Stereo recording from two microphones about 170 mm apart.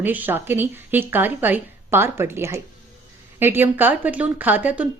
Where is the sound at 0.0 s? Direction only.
10° right (ahead or behind).